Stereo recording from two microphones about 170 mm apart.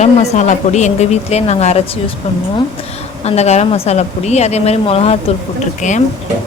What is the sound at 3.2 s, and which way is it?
A woman's voice, 40° left (ahead or behind).